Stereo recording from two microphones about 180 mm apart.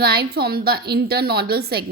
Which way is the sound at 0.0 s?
60° right (ahead or behind).